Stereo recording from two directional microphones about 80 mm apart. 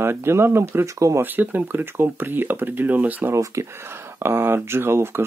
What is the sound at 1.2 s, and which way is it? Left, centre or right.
Speech, right.